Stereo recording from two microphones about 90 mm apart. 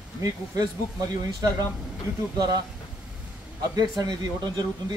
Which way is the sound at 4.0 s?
50° right (ahead or behind).